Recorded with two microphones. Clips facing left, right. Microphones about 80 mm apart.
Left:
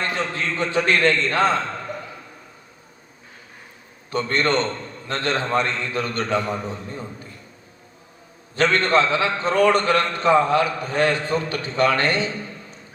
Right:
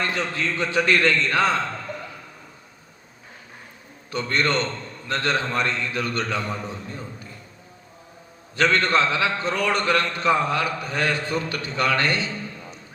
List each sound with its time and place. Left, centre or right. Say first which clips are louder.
0.0 s a man's voice: left 1 dB; left
4.1 s a man's voice: left 2 dB; left
8.5 s a man's voice: left 2 dB; left